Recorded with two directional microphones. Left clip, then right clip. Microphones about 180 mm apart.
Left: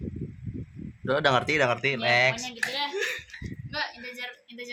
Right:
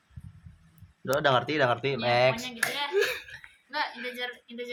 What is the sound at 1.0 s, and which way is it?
Speech, 15° left (ahead or behind).